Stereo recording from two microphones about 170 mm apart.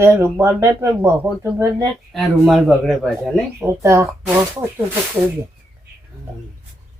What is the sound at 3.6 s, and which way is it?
Speech, 15° right (ahead or behind).